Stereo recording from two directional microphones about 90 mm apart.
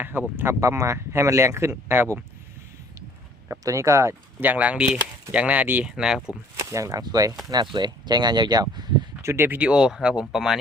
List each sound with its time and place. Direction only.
0.0 s speech: 25° right (ahead or behind)
3.6 s speech: 35° right (ahead or behind)
4.4 s speech: 15° right (ahead or behind)
6.0 s speech: 5° right (ahead or behind)
6.6 s speech: 35° right (ahead or behind)
7.5 s speech: 55° right (ahead or behind)
8.7 s a sound: 50° right (ahead or behind)
9.2 s speech: 30° right (ahead or behind)
9.6 s speech: 10° right (ahead or behind)